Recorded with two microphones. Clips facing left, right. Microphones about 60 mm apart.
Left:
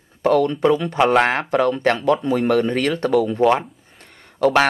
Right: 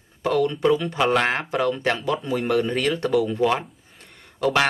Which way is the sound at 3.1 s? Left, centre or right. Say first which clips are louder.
Left 4 dB; centre.